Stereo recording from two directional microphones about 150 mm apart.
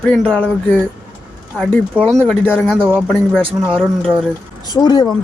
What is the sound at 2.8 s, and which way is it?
Speech, 15° right (ahead or behind).